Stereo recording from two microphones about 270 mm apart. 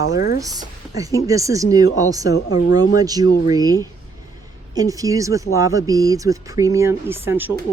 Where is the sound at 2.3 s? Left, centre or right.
Left.